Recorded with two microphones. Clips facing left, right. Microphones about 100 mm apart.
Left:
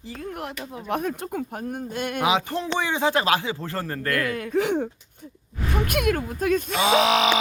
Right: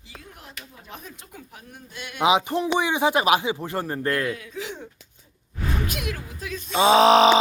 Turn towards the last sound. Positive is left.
turn(degrees=-35)  # may be behind; listen again after turning